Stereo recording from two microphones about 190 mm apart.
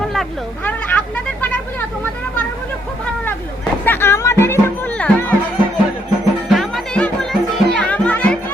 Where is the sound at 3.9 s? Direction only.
15° left (ahead or behind).